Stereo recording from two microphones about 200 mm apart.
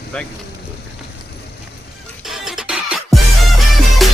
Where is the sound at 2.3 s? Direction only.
Centre (ahead or behind).